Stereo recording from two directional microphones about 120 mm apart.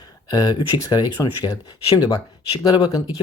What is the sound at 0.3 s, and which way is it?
Speech, 35° left (ahead or behind).